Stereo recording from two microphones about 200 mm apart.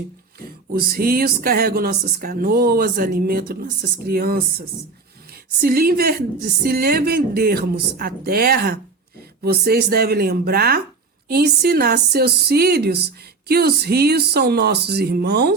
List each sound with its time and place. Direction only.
0.3 s speech: 50° right (ahead or behind)